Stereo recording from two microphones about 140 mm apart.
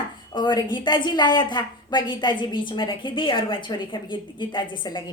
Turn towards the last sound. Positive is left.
turn(degrees=35)  # may be behind; listen again after turning